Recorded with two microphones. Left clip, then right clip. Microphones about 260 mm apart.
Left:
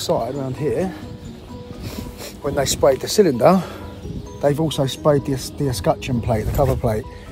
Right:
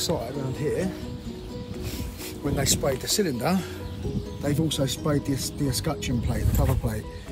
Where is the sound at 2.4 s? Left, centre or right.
Left.